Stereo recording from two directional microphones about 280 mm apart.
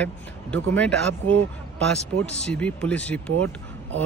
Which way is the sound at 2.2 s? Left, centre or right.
Centre.